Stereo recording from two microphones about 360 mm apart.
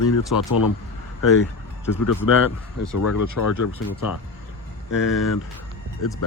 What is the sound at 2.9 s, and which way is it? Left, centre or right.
Speech, left.